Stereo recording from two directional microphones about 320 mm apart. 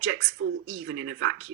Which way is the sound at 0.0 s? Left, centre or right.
Right.